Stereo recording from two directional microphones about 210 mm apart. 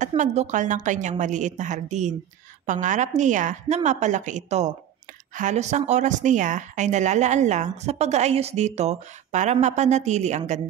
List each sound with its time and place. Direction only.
0.0 s a woman's voice: 35° right (ahead or behind)